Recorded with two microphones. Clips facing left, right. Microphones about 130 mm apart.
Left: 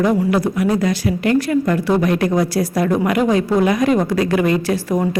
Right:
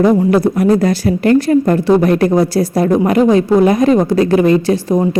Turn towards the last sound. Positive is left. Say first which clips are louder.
# right 5 dB
turn(degrees=-20)  # may be behind; listen again after turning